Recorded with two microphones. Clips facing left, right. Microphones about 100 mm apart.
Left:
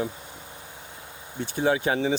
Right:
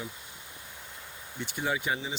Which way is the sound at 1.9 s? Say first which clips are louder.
Left 10 dB; 70° left (ahead or behind).